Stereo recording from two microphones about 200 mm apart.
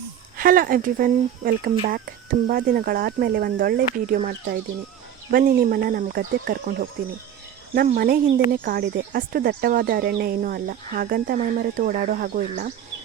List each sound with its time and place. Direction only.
0.3 s speech: 45° right (ahead or behind)
5.3 s speech: 45° right (ahead or behind)